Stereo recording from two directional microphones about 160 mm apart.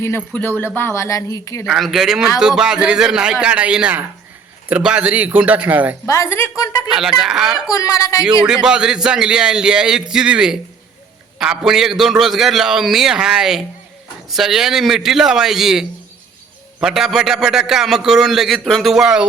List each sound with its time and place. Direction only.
0.3 s speech: 10° left (ahead or behind)
1.6 s a man's voice: centre (ahead or behind)
6.1 s a woman's voice: 15° left (ahead or behind)
6.9 s a man's voice: centre (ahead or behind)
7.7 s a woman's voice: 20° left (ahead or behind)
8.4 s a man's voice: 5° right (ahead or behind)